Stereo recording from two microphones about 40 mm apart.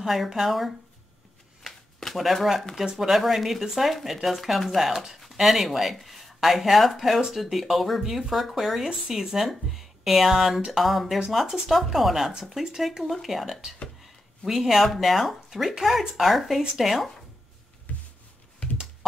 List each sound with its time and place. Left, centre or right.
0.0 s speech: centre
1.6 s shuffling cards: centre
2.7 s speech: centre
17.9 s a sound: left